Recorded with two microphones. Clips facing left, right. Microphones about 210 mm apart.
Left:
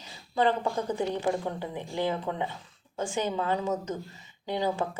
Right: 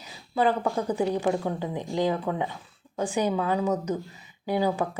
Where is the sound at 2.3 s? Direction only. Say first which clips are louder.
Right 4 dB; 45° right (ahead or behind).